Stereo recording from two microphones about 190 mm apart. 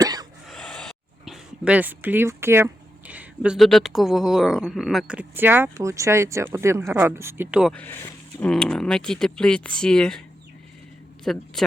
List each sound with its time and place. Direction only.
0.0 s a sound: 20° right (ahead or behind)
0.4 s speech: centre (ahead or behind)
7.7 s speech: 10° left (ahead or behind)
11.3 s speech: centre (ahead or behind)